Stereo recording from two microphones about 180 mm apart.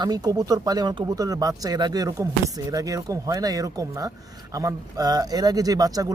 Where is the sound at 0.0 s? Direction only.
20° right (ahead or behind).